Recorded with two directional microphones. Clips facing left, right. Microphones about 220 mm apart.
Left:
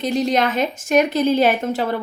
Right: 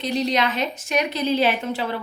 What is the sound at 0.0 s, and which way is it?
A woman's voice, 50° left (ahead or behind).